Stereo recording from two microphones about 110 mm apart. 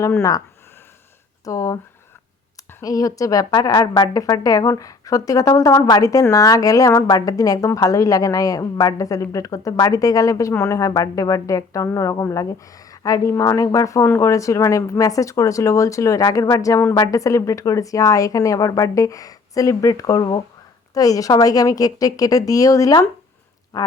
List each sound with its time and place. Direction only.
0.0 s speech: 25° left (ahead or behind)
1.5 s a woman's voice: 30° left (ahead or behind)
2.8 s a woman's voice: 30° left (ahead or behind)